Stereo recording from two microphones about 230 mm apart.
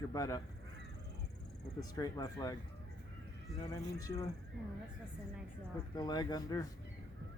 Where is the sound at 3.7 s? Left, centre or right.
Centre.